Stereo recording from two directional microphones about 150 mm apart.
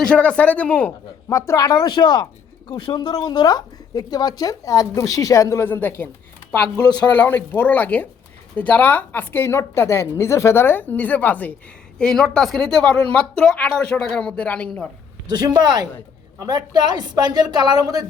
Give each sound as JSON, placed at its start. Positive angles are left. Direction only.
{"t": 0.0, "sound": "a woman's voice", "side_deg": 5}
{"t": 1.3, "sound": "speech", "side_deg": 20}
{"t": 7.1, "sound": "a woman's voice", "side_deg": 10}
{"t": 15.3, "sound": "a woman's voice", "side_deg": -25}